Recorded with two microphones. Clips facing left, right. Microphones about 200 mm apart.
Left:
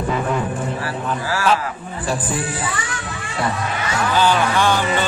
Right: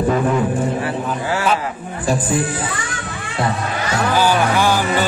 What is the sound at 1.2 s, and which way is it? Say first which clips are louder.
Speech: right 1 dB; 25° right (ahead or behind).